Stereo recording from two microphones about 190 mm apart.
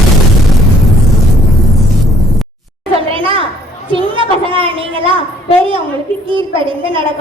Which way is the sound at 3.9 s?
25° right (ahead or behind).